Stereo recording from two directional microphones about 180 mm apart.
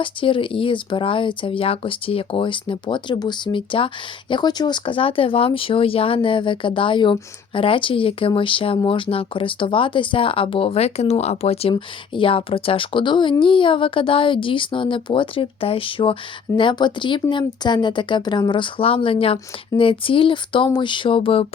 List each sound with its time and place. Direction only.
0.0 s speech: 30° left (ahead or behind)